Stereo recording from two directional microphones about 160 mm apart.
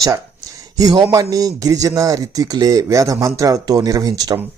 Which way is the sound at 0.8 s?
25° right (ahead or behind).